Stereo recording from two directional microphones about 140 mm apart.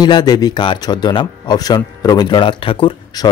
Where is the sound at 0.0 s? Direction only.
30° left (ahead or behind).